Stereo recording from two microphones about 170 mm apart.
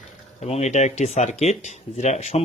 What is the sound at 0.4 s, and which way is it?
Speech, 40° left (ahead or behind).